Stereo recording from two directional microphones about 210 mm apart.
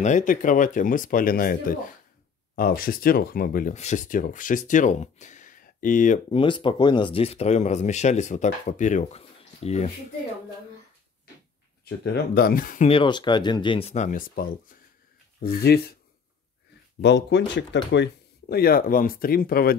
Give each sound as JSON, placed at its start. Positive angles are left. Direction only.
{"t": 0.0, "sound": "speech", "side_deg": 40}
{"t": 6.3, "sound": "speech", "side_deg": 25}
{"t": 11.8, "sound": "speech", "side_deg": 50}
{"t": 12.8, "sound": "speech", "side_deg": 25}
{"t": 17.0, "sound": "speech", "side_deg": 55}